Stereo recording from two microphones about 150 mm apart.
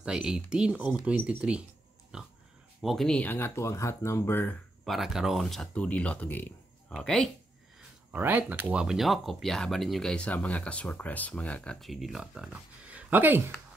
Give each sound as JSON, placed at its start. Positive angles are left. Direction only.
{"t": 0.0, "sound": "speech", "side_deg": -5}
{"t": 2.1, "sound": "pig", "side_deg": -5}
{"t": 2.8, "sound": "speech", "side_deg": 0}
{"t": 4.8, "sound": "speech", "side_deg": 0}
{"t": 8.1, "sound": "speech", "side_deg": -10}